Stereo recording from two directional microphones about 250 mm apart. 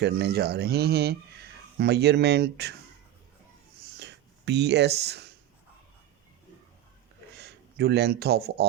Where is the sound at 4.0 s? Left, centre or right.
Right.